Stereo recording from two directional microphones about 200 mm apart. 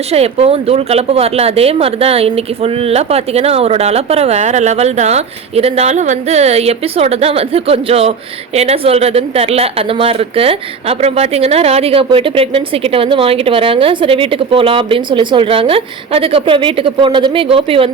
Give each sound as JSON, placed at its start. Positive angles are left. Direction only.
{"t": 0.1, "sound": "speech", "side_deg": -30}